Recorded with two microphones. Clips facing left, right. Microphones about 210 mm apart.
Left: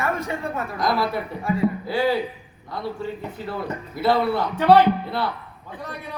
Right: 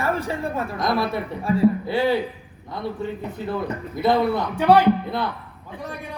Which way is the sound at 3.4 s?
20° right (ahead or behind).